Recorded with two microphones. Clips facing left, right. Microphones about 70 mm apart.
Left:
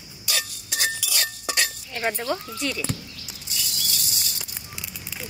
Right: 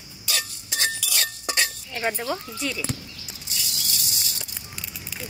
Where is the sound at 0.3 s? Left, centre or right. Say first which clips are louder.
Even; centre.